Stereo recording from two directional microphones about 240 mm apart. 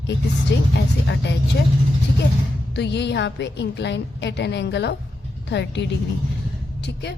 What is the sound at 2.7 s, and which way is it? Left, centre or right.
A woman's voice, left.